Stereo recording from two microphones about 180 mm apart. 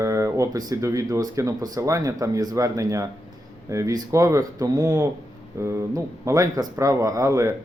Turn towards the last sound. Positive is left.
turn(degrees=-15)  # may be behind; listen again after turning